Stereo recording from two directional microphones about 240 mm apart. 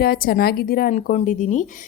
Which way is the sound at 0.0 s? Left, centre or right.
Left.